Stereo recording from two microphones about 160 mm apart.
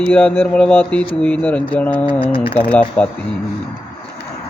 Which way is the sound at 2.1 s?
30° left (ahead or behind).